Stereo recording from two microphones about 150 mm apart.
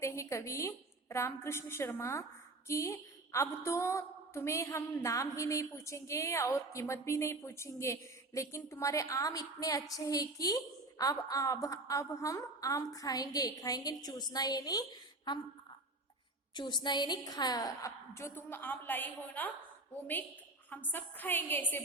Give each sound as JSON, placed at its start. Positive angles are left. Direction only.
{"t": 0.0, "sound": "a woman's voice", "side_deg": 20}
{"t": 16.6, "sound": "a woman's voice", "side_deg": 30}
{"t": 20.7, "sound": "a woman's voice", "side_deg": 15}